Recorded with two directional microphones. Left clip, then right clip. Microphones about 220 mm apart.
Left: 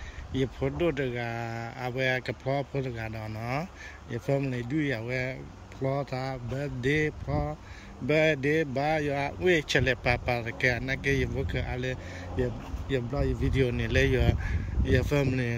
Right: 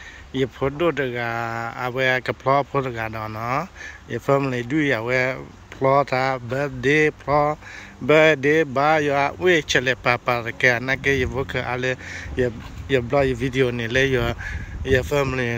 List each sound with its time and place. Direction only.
0.3 s speech: 5° left (ahead or behind)
7.2 s speech: 45° right (ahead or behind)
8.1 s speech: centre (ahead or behind)